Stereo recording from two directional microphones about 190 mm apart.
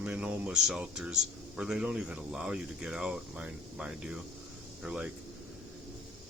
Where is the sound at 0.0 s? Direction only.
5° right (ahead or behind).